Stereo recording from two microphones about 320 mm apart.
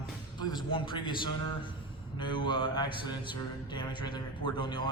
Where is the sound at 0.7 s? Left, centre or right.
Centre.